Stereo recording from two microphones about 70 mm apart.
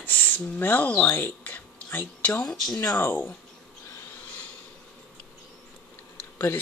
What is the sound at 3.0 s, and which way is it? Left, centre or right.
Speech, left.